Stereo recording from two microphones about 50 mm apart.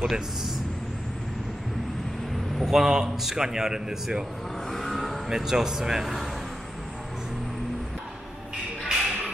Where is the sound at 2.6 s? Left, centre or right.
Centre.